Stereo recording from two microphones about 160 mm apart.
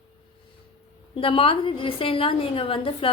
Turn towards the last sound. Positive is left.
turn(degrees=35)  # may be behind; listen again after turning